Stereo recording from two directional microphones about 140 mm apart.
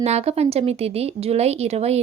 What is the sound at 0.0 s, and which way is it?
Speech, 50° right (ahead or behind).